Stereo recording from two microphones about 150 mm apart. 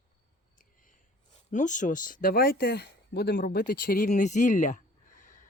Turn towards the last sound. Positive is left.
turn(degrees=55)  # may be behind; listen again after turning